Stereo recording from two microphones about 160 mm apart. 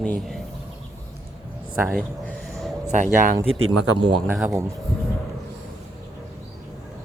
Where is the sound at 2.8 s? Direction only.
50° right (ahead or behind).